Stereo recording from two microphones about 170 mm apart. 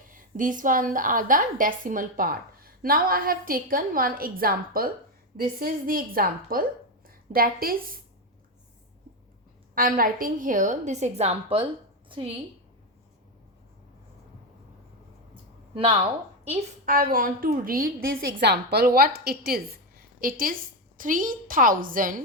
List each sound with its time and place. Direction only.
0.1 s a woman's voice: 50° right (ahead or behind)
9.7 s a woman's voice: 55° right (ahead or behind); by 12.3 s 30° right (ahead or behind)
15.7 s speech: 30° right (ahead or behind)
16.8 s a woman's voice: 55° right (ahead or behind)